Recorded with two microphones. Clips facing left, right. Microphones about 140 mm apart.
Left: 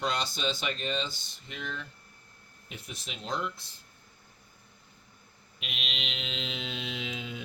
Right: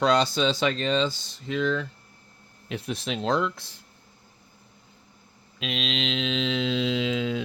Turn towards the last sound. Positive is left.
turn(degrees=-90)